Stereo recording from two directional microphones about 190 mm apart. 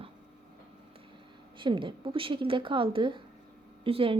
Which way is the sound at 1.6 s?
25° right (ahead or behind).